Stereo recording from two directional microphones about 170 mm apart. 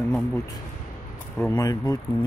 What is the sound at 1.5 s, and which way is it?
Speech, 20° left (ahead or behind).